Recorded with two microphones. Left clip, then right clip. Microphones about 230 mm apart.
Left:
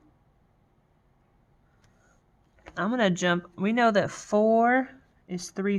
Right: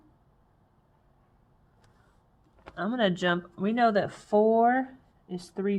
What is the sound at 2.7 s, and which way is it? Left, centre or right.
Speech, left.